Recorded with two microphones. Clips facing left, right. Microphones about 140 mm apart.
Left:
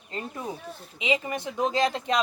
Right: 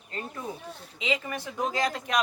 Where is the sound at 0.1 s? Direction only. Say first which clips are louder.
Left 2 dB; 20° left (ahead or behind).